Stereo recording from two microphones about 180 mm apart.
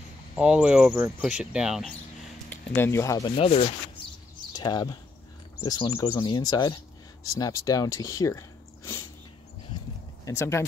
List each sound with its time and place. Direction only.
0.4 s speech: 5° right (ahead or behind)
2.5 s speech: 10° left (ahead or behind)
3.3 s speech: 35° left (ahead or behind); by 9.0 s 15° left (ahead or behind)
10.2 s speech: 15° left (ahead or behind)